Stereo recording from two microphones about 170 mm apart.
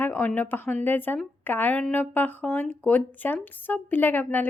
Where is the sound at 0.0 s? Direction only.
10° left (ahead or behind).